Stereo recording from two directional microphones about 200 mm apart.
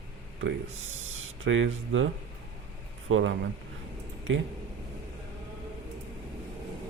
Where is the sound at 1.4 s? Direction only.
70° right (ahead or behind).